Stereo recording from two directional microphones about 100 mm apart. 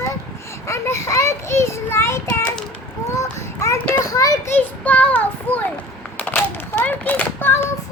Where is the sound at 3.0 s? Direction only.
30° left (ahead or behind).